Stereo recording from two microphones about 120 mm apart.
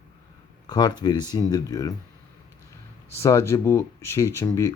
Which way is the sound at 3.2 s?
25° left (ahead or behind).